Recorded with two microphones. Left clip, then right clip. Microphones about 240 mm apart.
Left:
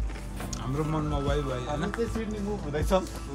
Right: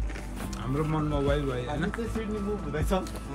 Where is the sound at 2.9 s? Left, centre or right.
Left.